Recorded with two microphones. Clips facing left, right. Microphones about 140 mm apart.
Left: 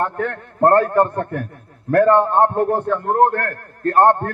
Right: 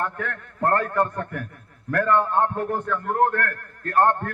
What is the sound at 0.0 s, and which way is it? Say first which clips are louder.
A man's voice: left 7 dB; 35° left (ahead or behind).